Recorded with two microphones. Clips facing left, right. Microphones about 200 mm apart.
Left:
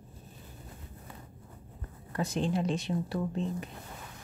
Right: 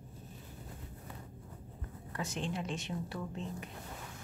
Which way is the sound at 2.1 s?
35° left (ahead or behind).